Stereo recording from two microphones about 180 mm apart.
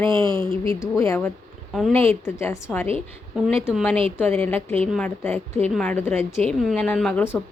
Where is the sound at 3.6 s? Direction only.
5° right (ahead or behind).